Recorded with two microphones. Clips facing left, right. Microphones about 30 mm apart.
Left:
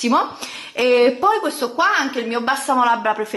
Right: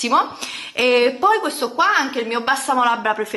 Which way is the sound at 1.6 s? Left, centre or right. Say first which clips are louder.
Even; centre.